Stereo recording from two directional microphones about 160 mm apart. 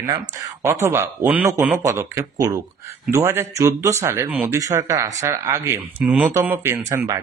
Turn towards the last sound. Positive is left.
turn(degrees=-15)  # may be behind; listen again after turning